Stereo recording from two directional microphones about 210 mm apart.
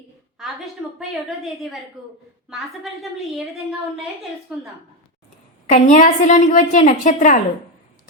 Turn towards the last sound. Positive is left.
turn(degrees=35)  # may be behind; listen again after turning